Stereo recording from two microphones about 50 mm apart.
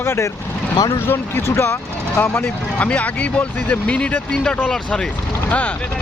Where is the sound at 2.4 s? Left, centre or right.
Left.